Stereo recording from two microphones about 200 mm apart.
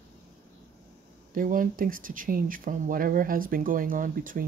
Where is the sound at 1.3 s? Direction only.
45° right (ahead or behind).